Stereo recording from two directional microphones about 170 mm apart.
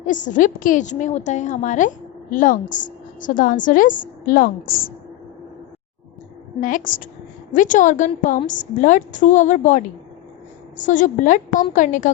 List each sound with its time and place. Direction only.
0.0 s a woman's voice: 50° left (ahead or behind)
6.6 s a woman's voice: 50° left (ahead or behind)
10.8 s a woman's voice: 50° left (ahead or behind)